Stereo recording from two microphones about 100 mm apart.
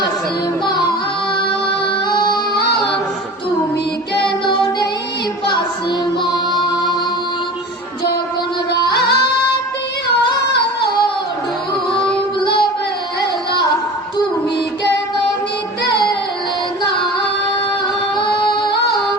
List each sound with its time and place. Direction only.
0.6 s music: 45° left (ahead or behind)
1.4 s music: 55° left (ahead or behind)
4.4 s music: 55° left (ahead or behind)
6.5 s music: centre (ahead or behind)
8.7 s music: 45° left (ahead or behind)
18.2 s music: 55° left (ahead or behind)